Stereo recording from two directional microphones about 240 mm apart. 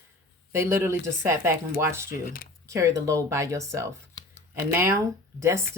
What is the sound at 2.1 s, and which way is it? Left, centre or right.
Speech, left.